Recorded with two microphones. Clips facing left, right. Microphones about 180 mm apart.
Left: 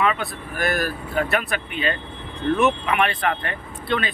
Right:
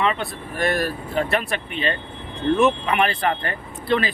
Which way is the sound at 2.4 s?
25° right (ahead or behind).